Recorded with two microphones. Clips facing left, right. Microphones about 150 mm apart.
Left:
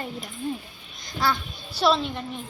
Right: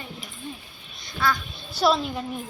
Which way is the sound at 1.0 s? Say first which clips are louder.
Left 1 dB; 45° left (ahead or behind).